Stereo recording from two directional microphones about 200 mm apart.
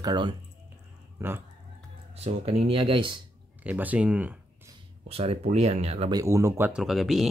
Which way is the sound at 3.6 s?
5° right (ahead or behind).